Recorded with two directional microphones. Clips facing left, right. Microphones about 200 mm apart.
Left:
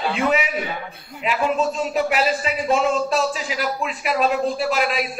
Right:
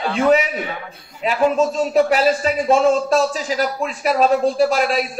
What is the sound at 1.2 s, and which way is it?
A man's voice, 40° right (ahead or behind).